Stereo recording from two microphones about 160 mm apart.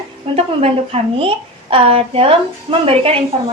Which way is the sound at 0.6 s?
35° right (ahead or behind).